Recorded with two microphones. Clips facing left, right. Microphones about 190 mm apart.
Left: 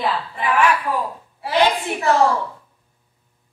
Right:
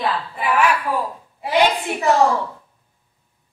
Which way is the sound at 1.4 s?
15° right (ahead or behind).